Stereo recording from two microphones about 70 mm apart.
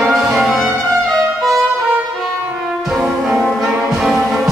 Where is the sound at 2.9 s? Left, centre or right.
Centre.